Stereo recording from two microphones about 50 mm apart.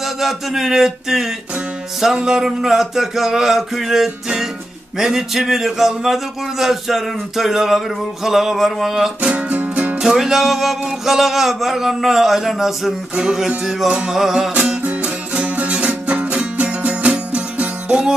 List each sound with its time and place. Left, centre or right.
0.0 s a sound: centre
4.9 s speech: centre
9.2 s music: right
9.9 s speech: centre
13.1 s a sound: centre
14.8 s music: right